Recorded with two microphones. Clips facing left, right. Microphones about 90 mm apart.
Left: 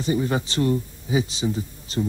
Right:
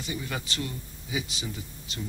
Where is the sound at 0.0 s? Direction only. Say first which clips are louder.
Left 11 dB; 35° left (ahead or behind).